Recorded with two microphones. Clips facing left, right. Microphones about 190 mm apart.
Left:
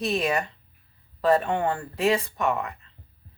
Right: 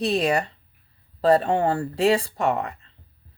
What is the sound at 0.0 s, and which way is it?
Speech, 35° right (ahead or behind).